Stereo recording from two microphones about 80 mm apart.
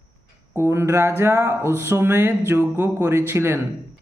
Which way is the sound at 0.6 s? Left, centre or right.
Right.